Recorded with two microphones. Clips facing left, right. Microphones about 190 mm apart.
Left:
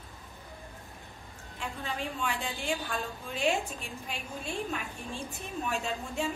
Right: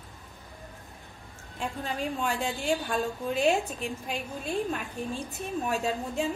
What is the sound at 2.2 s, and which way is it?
A woman's voice, 40° right (ahead or behind).